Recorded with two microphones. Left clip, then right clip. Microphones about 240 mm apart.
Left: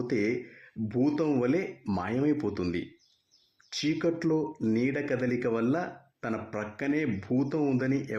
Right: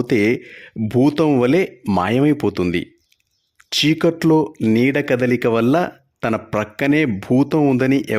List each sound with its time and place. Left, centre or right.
0.0 s speech: right